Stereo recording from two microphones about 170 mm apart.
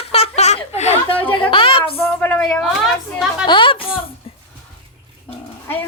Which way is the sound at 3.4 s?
30° left (ahead or behind).